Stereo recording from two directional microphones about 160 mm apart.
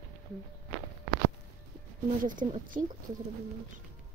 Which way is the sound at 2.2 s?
55° right (ahead or behind).